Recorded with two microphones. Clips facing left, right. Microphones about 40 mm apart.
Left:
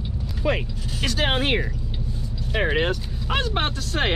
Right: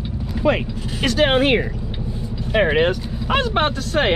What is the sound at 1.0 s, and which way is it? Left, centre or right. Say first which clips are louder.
Speech: right 7 dB; centre.